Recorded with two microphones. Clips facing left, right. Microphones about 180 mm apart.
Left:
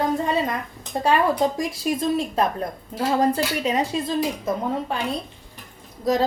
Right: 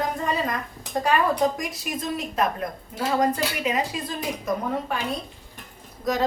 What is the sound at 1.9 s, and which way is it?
Speech, 30° left (ahead or behind).